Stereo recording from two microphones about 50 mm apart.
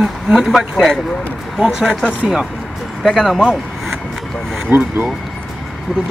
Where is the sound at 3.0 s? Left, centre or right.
Centre.